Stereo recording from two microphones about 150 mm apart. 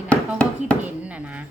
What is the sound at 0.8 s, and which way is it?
Speech, 10° right (ahead or behind).